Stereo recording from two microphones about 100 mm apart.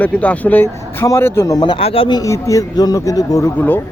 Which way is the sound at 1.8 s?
75° left (ahead or behind).